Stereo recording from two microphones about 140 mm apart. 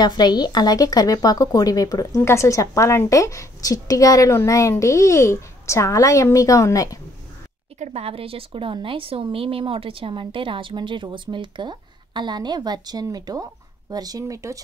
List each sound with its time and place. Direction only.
0.0 s speech: 30° left (ahead or behind)
7.8 s a woman's voice: 45° right (ahead or behind); by 14.6 s 25° right (ahead or behind)